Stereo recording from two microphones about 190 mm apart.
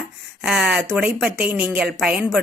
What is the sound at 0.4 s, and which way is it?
A woman's voice, 5° right (ahead or behind).